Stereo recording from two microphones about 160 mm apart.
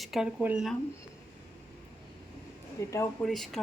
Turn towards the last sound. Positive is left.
turn(degrees=0)  # may be behind; listen again after turning